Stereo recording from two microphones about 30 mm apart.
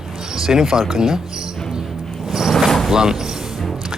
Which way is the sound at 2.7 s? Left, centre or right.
Centre.